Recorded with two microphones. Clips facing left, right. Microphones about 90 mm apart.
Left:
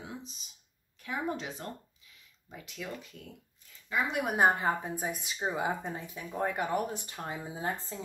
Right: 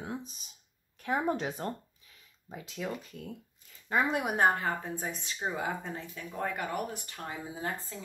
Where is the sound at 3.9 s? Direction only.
50° right (ahead or behind).